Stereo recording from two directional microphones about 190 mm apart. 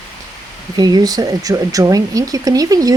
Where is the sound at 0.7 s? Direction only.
20° right (ahead or behind).